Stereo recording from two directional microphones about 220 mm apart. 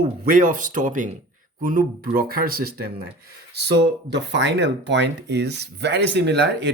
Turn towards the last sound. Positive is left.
turn(degrees=-50)  # may be behind; listen again after turning